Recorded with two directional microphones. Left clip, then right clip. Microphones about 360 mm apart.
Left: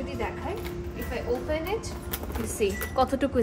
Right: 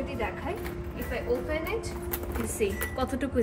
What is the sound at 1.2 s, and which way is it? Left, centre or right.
A woman's voice, centre.